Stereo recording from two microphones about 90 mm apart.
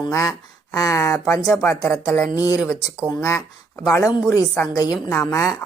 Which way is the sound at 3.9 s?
30° left (ahead or behind).